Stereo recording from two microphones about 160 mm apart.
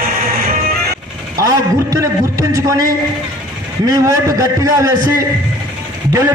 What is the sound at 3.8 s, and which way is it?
A man's voice, 20° right (ahead or behind).